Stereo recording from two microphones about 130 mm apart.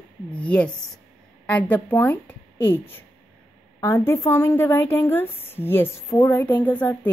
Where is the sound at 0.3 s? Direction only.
10° left (ahead or behind).